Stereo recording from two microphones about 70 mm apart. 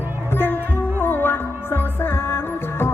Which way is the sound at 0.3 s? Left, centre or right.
Left.